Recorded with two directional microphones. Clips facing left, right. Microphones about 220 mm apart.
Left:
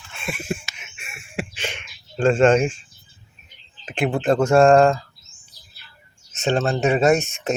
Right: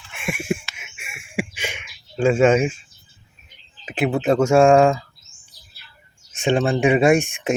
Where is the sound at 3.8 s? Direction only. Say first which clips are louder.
Right 1 dB; 5° right (ahead or behind).